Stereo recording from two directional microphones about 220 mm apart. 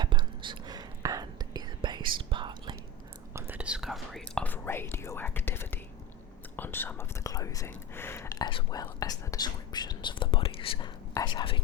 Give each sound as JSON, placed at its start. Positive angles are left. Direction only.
{"t": 0.0, "sound": "whispering", "side_deg": -20}
{"t": 3.3, "sound": "whispering", "side_deg": -10}